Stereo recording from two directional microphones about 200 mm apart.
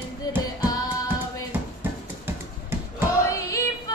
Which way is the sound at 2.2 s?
10° right (ahead or behind).